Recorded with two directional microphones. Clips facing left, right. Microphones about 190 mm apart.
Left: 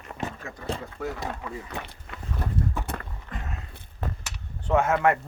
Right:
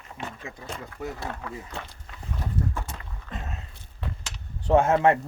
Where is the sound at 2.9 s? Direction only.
60° left (ahead or behind).